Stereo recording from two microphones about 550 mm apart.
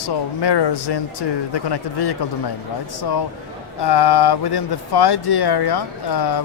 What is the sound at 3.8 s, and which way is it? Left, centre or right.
Speech, left.